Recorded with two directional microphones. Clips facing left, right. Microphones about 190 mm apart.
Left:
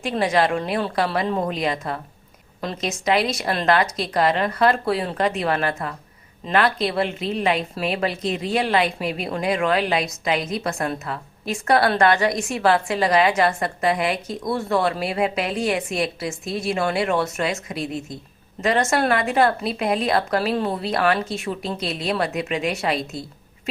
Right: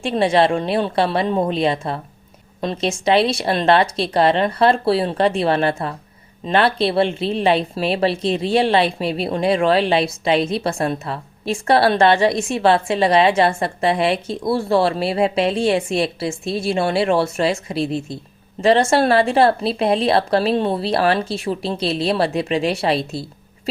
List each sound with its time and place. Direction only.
0.0 s speech: 25° right (ahead or behind)